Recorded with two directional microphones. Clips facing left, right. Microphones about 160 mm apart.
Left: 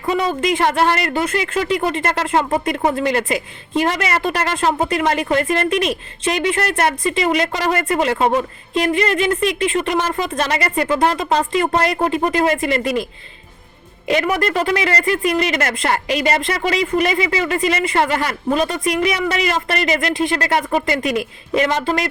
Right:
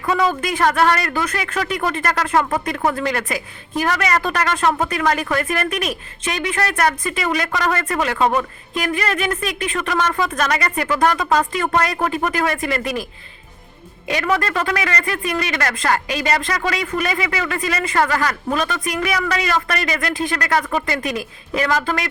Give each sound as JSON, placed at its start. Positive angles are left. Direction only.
{"t": 0.0, "sound": "speech", "side_deg": 25}
{"t": 14.1, "sound": "speech", "side_deg": 25}